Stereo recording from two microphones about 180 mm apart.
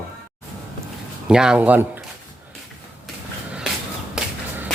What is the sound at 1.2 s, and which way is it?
Speech, 5° right (ahead or behind).